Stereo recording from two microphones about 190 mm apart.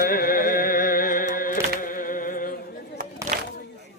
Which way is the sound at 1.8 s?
45° left (ahead or behind).